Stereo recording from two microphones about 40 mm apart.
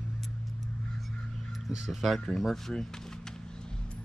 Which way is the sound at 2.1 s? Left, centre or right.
Centre.